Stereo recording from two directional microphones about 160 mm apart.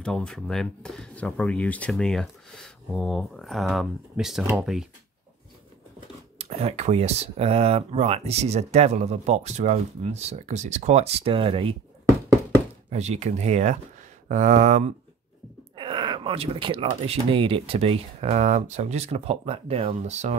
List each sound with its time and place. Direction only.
0.0 s speech: 5° left (ahead or behind)
6.3 s speech: 40° right (ahead or behind)
12.9 s speech: 45° right (ahead or behind)
15.7 s speech: 30° right (ahead or behind)